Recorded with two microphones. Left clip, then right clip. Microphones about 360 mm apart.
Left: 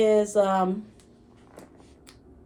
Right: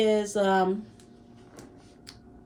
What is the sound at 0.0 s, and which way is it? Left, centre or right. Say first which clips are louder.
Speech: left 4 dB; centre.